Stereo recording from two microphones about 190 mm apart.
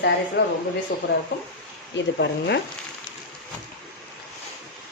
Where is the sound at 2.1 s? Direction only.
65° left (ahead or behind).